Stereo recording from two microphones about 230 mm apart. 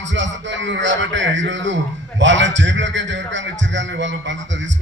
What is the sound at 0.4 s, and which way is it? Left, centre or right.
A man's voice, right.